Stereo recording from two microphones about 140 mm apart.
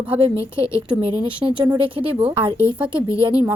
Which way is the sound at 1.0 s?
40° right (ahead or behind).